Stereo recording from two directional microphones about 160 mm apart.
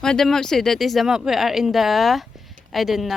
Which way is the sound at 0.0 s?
5° left (ahead or behind).